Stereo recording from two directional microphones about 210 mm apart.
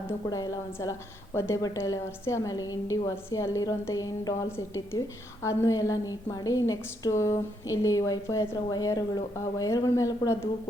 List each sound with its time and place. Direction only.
0.3 s a woman's voice: 15° left (ahead or behind)